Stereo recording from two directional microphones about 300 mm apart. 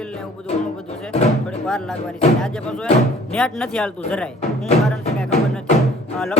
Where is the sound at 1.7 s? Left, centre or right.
Centre.